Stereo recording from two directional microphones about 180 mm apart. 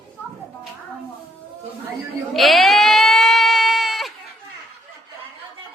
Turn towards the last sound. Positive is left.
turn(degrees=0)  # may be behind; listen again after turning